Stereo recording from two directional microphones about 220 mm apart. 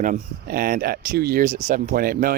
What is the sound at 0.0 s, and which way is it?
Speech, 40° right (ahead or behind).